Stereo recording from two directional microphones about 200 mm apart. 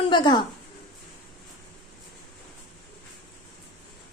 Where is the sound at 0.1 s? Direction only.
20° left (ahead or behind).